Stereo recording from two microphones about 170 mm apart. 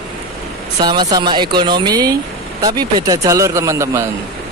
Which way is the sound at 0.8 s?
25° right (ahead or behind).